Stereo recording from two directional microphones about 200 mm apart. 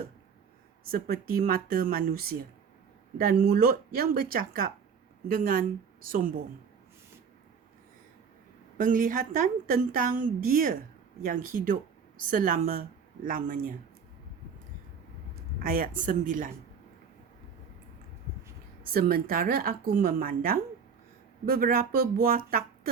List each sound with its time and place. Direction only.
0.9 s a woman's voice: 50° right (ahead or behind)
8.8 s a woman's voice: 40° right (ahead or behind)
15.6 s speech: 45° right (ahead or behind)
18.8 s a woman's voice: 50° right (ahead or behind)